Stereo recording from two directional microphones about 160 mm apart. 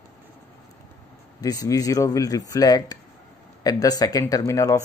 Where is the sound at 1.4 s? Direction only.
20° left (ahead or behind).